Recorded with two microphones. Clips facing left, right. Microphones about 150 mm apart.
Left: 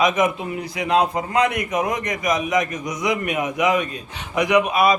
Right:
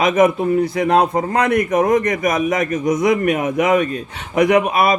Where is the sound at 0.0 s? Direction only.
55° right (ahead or behind).